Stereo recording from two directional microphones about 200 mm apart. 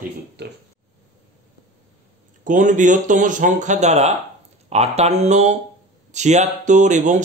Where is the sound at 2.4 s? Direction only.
40° right (ahead or behind).